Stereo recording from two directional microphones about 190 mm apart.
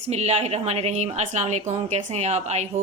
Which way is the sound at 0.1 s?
35° right (ahead or behind).